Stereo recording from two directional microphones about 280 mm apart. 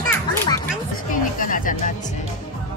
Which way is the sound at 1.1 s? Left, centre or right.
Left.